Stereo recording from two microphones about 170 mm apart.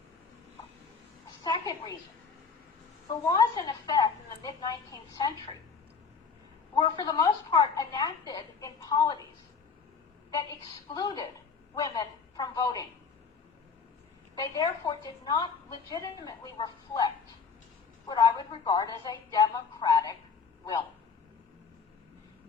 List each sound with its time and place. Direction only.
1.5 s a sound: 25° left (ahead or behind)
3.2 s a woman's voice: 20° left (ahead or behind)
6.7 s a woman's voice: 25° left (ahead or behind)
10.9 s a woman's voice: 25° left (ahead or behind)
14.3 s a woman's voice: 20° left (ahead or behind)
18.1 s a woman's voice: 25° left (ahead or behind)